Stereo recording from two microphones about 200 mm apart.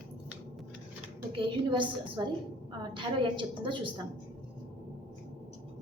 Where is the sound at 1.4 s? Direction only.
25° right (ahead or behind).